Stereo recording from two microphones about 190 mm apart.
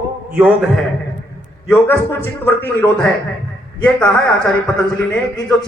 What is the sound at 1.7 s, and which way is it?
A man's voice, 10° left (ahead or behind).